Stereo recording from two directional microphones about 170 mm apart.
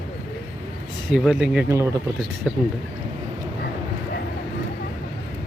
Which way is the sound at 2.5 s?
5° right (ahead or behind).